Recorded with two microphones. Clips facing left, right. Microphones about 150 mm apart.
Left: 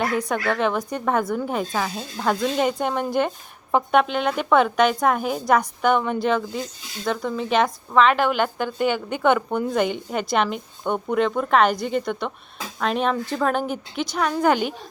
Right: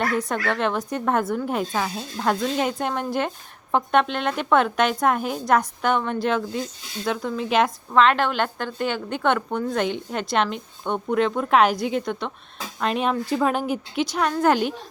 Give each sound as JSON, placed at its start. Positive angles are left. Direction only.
{"t": 0.0, "sound": "speech", "side_deg": 0}